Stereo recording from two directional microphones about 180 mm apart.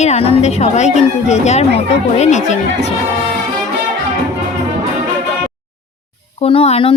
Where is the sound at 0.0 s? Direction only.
35° left (ahead or behind).